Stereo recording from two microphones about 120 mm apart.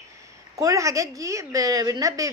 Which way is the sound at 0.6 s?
25° right (ahead or behind).